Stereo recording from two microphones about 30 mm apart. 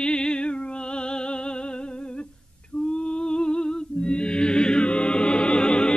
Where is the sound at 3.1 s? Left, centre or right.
Left.